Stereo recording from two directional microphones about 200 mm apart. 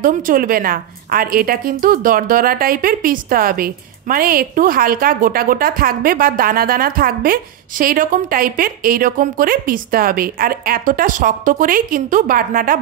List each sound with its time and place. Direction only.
0.0 s a woman's voice: 45° right (ahead or behind)